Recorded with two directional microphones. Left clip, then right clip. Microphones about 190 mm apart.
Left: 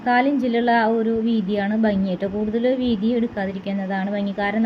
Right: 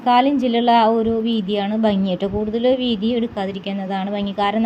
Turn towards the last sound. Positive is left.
turn(degrees=-25)  # may be behind; listen again after turning